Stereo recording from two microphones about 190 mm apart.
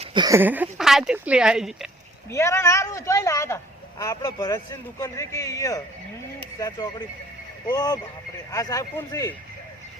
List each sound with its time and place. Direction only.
0.0 s speech: 25° right (ahead or behind); by 1.9 s centre (ahead or behind)
2.3 s speech: 15° left (ahead or behind)